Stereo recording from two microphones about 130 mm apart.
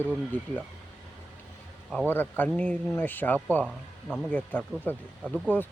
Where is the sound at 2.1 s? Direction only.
15° left (ahead or behind).